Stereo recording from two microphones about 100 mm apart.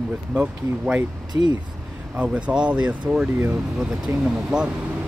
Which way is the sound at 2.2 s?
10° right (ahead or behind).